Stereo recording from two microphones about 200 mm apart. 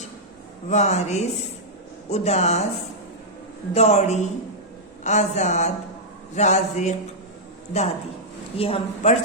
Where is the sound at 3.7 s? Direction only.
35° left (ahead or behind).